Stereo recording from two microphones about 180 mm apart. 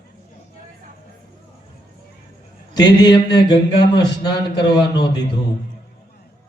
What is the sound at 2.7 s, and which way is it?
A man's voice, 25° left (ahead or behind).